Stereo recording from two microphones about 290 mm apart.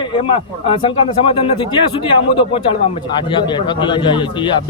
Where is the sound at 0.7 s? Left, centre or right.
Centre.